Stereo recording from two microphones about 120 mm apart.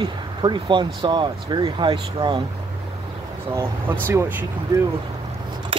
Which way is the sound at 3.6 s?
20° right (ahead or behind).